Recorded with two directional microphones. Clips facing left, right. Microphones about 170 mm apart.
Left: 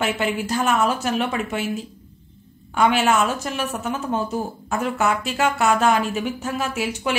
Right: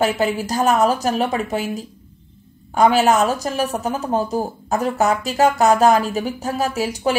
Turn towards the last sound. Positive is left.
turn(degrees=-35)  # may be behind; listen again after turning